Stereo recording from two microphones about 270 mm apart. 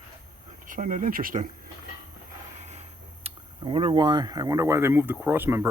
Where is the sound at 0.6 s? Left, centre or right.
Right.